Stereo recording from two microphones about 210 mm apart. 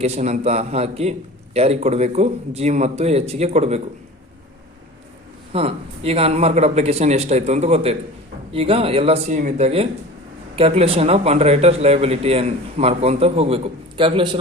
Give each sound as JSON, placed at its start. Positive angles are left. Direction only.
{"t": 0.0, "sound": "speech", "side_deg": -30}
{"t": 5.5, "sound": "a man's voice", "side_deg": -30}